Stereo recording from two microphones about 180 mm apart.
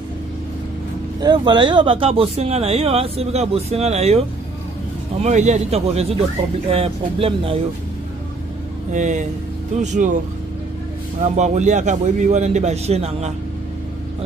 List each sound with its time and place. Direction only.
1.2 s speech: 25° right (ahead or behind)
5.2 s speech: 40° right (ahead or behind)
8.9 s speech: 45° right (ahead or behind)
11.3 s speech: 40° right (ahead or behind)